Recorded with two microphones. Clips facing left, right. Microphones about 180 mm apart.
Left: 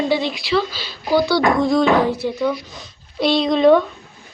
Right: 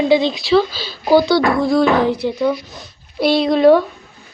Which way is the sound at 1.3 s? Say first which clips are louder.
Right 2 dB; 10° left (ahead or behind).